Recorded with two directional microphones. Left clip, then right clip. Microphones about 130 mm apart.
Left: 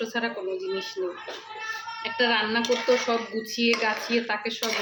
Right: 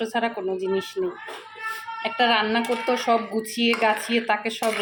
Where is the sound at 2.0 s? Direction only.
60° right (ahead or behind).